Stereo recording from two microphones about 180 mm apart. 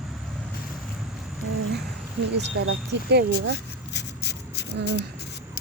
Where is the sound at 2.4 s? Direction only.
70° right (ahead or behind).